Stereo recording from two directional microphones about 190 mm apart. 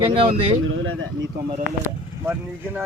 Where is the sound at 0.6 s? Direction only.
90° right.